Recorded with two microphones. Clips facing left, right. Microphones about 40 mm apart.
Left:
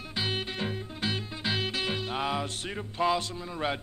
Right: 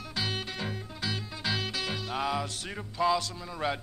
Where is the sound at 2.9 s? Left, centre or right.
Left.